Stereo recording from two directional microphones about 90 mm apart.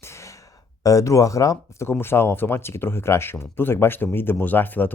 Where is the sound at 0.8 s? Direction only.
40° left (ahead or behind).